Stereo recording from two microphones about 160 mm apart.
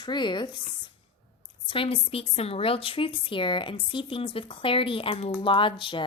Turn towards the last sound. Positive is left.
turn(degrees=30)  # may be behind; listen again after turning